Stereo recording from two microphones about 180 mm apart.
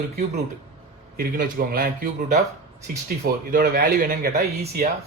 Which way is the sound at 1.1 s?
55° right (ahead or behind).